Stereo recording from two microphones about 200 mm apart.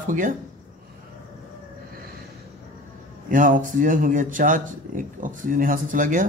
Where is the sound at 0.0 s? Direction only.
40° right (ahead or behind).